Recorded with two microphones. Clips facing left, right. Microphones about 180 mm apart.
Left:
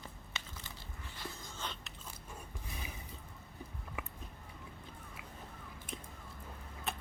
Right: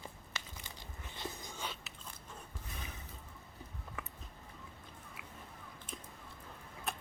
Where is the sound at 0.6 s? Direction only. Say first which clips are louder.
Even; 20° right (ahead or behind).